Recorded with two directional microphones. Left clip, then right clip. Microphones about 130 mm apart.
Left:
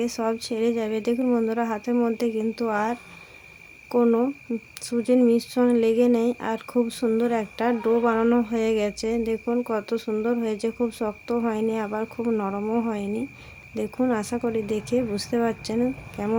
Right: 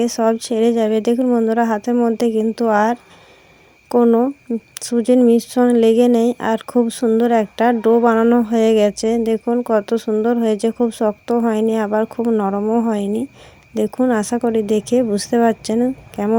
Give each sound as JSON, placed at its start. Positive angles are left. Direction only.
{"t": 0.0, "sound": "speech", "side_deg": -45}
{"t": 4.7, "sound": "speech", "side_deg": -50}
{"t": 12.2, "sound": "speech", "side_deg": -40}